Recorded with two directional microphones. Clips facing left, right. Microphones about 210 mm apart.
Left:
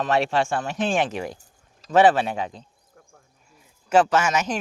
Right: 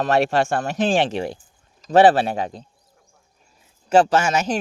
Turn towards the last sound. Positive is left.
turn(degrees=-30)  # may be behind; listen again after turning